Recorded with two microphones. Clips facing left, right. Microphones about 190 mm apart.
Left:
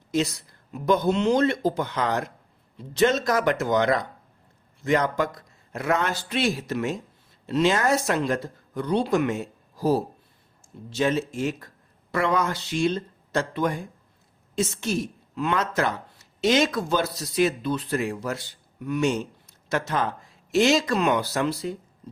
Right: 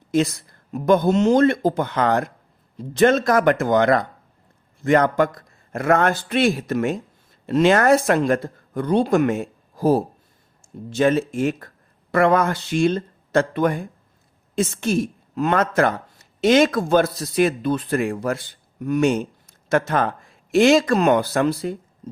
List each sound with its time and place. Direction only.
0.1 s speech: 50° right (ahead or behind)